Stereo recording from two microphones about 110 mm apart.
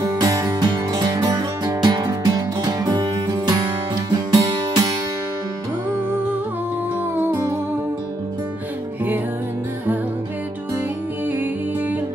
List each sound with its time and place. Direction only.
0.0 s music: 35° right (ahead or behind)
7.2 s music: 20° right (ahead or behind)